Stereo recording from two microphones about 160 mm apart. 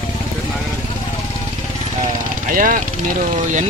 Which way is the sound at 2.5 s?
60° right (ahead or behind).